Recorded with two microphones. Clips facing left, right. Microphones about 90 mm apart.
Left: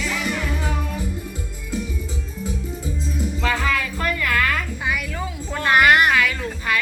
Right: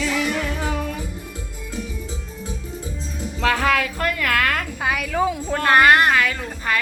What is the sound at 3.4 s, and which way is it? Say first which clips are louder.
Music: right 5 dB; 70° right (ahead or behind).